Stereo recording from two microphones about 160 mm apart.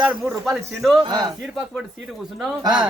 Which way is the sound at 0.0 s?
Centre (ahead or behind).